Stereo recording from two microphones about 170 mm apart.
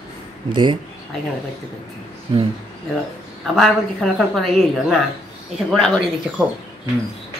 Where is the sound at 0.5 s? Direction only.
25° right (ahead or behind).